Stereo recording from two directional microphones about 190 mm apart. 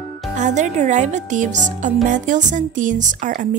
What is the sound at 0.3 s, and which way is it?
Speech, 40° right (ahead or behind).